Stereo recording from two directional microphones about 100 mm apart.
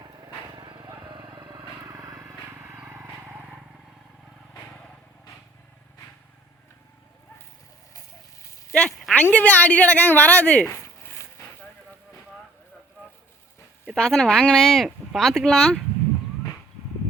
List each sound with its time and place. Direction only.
0.5 s vehicle: 55° right (ahead or behind)
1.8 s vehicle: 35° right (ahead or behind)
2.6 s vehicle: 25° right (ahead or behind)
8.7 s a sound: 10° left (ahead or behind)
9.2 s a woman's voice: 15° left (ahead or behind)
13.9 s speech: 5° left (ahead or behind)